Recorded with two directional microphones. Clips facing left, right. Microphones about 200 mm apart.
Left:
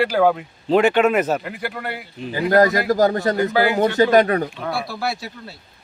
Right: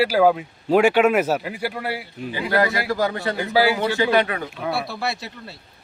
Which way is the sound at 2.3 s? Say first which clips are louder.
Left 6 dB; 40° left (ahead or behind).